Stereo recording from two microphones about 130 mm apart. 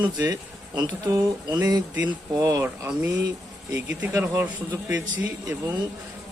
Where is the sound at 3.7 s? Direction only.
20° right (ahead or behind).